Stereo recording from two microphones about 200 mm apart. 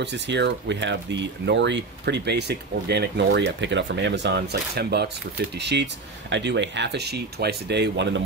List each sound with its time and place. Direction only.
0.0 s speech: 60° right (ahead or behind)